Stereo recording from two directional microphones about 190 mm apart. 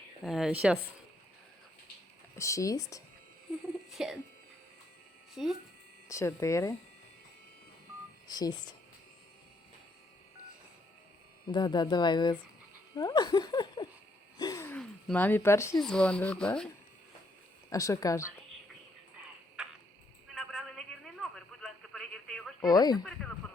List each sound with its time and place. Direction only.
0.2 s speech: centre (ahead or behind)
2.3 s speech: 15° left (ahead or behind)
3.8 s speech: centre (ahead or behind)
5.3 s speech: centre (ahead or behind)
6.1 s speech: 15° left (ahead or behind)
8.3 s speech: 20° left (ahead or behind)
11.4 s speech: 20° left (ahead or behind)
14.3 s gasp: 20° left (ahead or behind)
14.8 s speech: 5° left (ahead or behind)
15.8 s speech: 5° left (ahead or behind)
17.7 s speech: 15° left (ahead or behind)
19.6 s tick-tock: 5° right (ahead or behind)
20.2 s a sound: centre (ahead or behind)
22.7 s speech: 20° left (ahead or behind)